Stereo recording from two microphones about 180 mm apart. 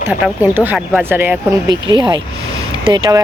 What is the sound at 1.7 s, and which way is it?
Speech, 25° right (ahead or behind).